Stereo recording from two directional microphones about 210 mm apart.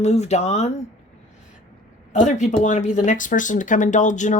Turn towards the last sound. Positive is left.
turn(degrees=35)  # may be behind; listen again after turning